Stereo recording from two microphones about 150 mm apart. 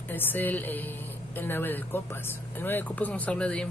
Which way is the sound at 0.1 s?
10° left (ahead or behind).